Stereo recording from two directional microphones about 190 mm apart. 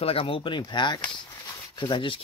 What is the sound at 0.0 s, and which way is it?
Speech, 30° left (ahead or behind).